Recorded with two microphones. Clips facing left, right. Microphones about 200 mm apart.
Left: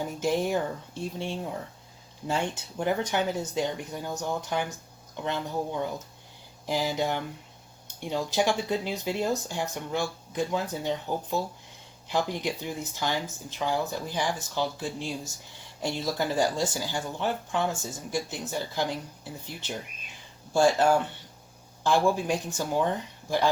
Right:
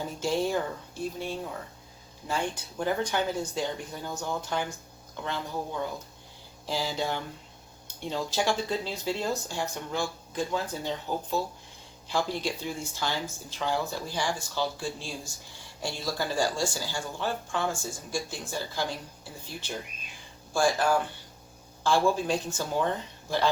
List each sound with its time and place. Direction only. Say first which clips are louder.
0.0 s speech: left 1 dB; 15° left (ahead or behind)
6.7 s speech: left 3 dB; 15° left (ahead or behind)